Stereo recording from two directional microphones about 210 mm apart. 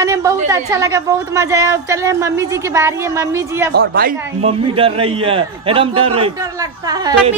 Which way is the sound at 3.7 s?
45° right (ahead or behind).